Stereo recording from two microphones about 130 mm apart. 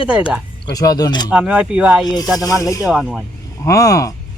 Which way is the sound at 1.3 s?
10° right (ahead or behind).